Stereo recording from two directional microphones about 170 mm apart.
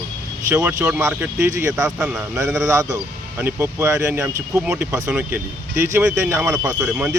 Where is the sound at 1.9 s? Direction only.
5° right (ahead or behind).